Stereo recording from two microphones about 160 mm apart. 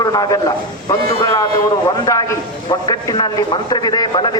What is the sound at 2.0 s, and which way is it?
A man's voice, 20° left (ahead or behind).